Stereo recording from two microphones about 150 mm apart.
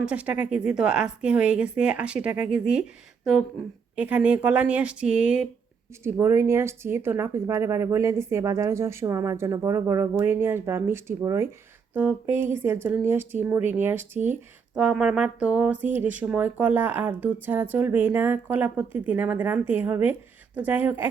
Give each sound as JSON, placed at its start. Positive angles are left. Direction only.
{"t": 0.0, "sound": "speech", "side_deg": -10}
{"t": 3.9, "sound": "speech", "side_deg": -10}
{"t": 6.0, "sound": "speech", "side_deg": -15}